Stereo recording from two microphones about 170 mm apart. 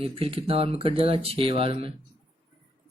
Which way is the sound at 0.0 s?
35° right (ahead or behind).